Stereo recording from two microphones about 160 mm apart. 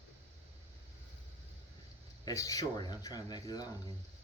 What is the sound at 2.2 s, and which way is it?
Speech, 20° left (ahead or behind).